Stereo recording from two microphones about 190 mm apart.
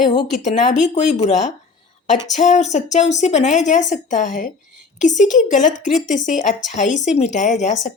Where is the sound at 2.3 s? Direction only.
40° left (ahead or behind).